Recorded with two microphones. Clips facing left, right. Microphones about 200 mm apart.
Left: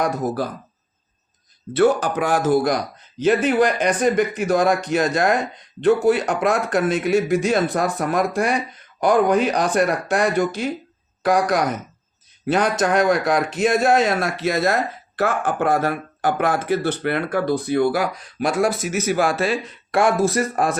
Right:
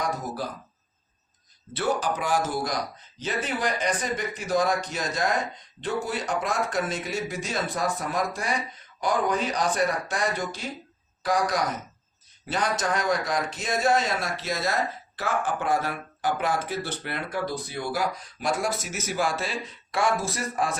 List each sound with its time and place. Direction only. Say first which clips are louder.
1.7 s speech: left 9 dB; 65° left (ahead or behind)